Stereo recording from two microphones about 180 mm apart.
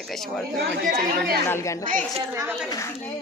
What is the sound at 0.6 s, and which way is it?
Speech, 60° right (ahead or behind).